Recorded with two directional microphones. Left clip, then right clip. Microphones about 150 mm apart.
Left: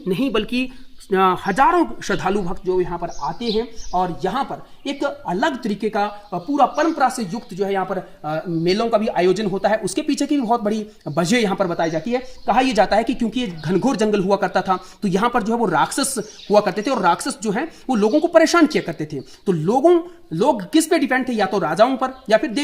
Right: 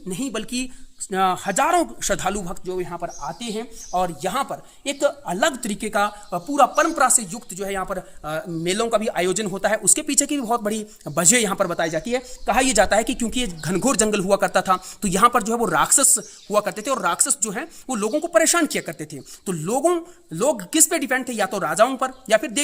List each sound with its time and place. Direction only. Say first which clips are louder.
0.3 s a man's voice: left 7 dB; 90° right; by 2.8 s 40° right (ahead or behind)
2.8 s speech: left 4 dB; 30° right (ahead or behind)
7.2 s speech: left 5 dB; 40° right (ahead or behind)
7.6 s speech: left 5 dB; 15° right (ahead or behind)